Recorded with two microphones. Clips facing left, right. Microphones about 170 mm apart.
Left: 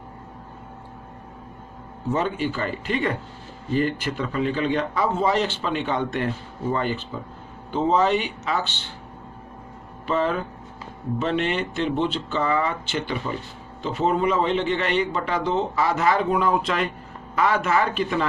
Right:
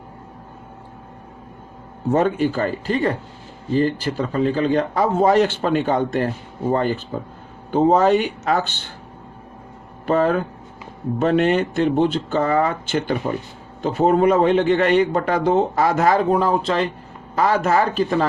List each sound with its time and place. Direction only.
2.1 s a man's voice: 45° right (ahead or behind)
10.1 s a man's voice: 45° right (ahead or behind)